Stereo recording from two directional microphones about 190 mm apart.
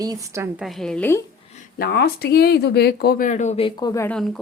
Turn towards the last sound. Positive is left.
turn(degrees=0)  # may be behind; listen again after turning